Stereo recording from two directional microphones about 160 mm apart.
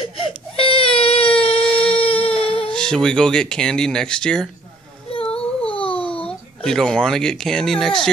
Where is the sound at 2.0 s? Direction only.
35° left (ahead or behind).